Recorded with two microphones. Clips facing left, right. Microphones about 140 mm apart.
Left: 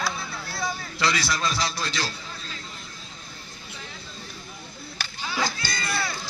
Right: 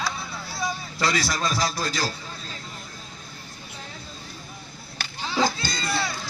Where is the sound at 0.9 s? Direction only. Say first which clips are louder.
Right 1 dB; 40° right (ahead or behind).